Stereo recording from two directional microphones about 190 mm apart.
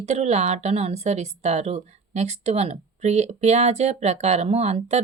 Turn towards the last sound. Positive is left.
turn(degrees=-35)  # may be behind; listen again after turning